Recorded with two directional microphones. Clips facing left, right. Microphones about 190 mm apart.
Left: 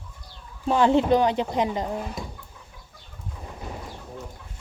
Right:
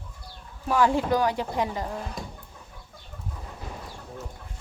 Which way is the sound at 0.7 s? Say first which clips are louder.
Left 4 dB; 25° left (ahead or behind).